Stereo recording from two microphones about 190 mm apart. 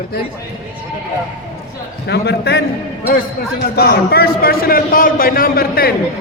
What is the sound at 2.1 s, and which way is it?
Speech, 60° left (ahead or behind).